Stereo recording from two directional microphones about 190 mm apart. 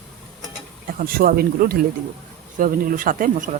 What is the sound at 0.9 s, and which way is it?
Speech, 50° right (ahead or behind).